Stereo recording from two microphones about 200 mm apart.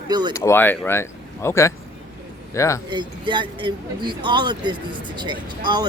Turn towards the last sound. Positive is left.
turn(degrees=-20)  # may be behind; listen again after turning